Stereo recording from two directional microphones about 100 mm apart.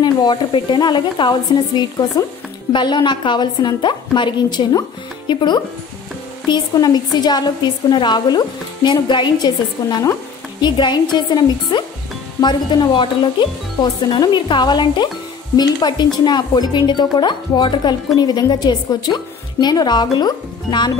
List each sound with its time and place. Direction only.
0.0 s speech: 50° left (ahead or behind)
14.1 s speech: 50° left (ahead or behind)